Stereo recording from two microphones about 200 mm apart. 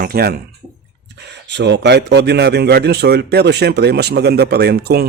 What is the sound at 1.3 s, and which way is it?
A man's voice, 60° right (ahead or behind).